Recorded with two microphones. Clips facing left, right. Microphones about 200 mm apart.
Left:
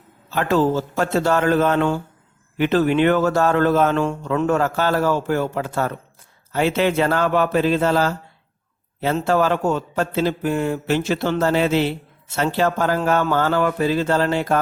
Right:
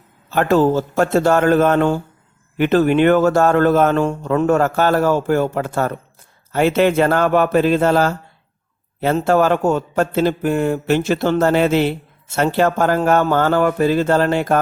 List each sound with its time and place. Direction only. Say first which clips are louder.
0.3 s a man's voice: right 4 dB; 50° right (ahead or behind)